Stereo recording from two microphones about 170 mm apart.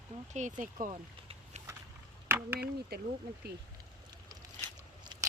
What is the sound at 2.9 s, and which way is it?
Speech, 65° right (ahead or behind).